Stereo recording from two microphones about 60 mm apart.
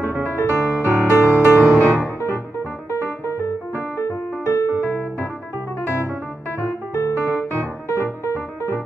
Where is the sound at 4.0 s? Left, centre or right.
Left.